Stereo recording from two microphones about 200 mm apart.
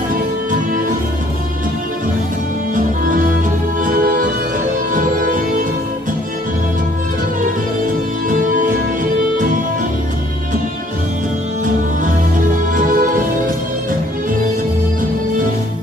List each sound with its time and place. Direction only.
2.7 s music: 45° right (ahead or behind)
7.8 s music: 40° right (ahead or behind)
12.7 s music: 45° right (ahead or behind)